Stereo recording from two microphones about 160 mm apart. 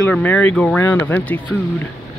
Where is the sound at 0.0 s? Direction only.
10° left (ahead or behind).